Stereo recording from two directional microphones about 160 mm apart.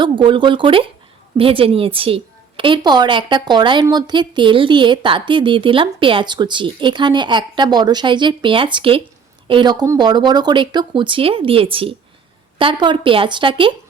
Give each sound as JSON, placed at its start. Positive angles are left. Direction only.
{"t": 0.0, "sound": "a woman's voice", "side_deg": -30}